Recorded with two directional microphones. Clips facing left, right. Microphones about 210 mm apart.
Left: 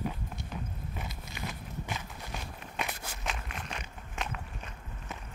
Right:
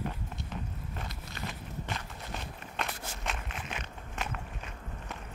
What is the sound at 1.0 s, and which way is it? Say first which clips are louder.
Walk: even; 10° left (ahead or behind).